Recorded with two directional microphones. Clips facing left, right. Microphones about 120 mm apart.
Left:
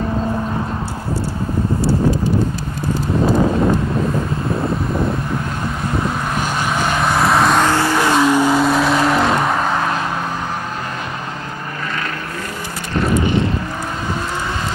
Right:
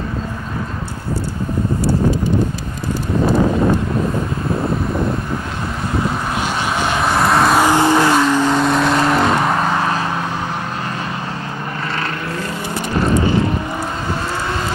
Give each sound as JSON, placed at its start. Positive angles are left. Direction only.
{"t": 6.8, "sound": "vehicle", "side_deg": 0}
{"t": 7.7, "sound": "vehicle", "side_deg": -20}
{"t": 8.2, "sound": "vehicle", "side_deg": 10}